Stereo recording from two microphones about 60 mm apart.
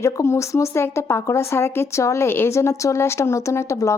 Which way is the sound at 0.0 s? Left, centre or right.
Left.